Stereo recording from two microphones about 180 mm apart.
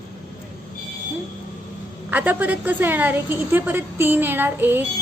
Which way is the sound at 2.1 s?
10° right (ahead or behind).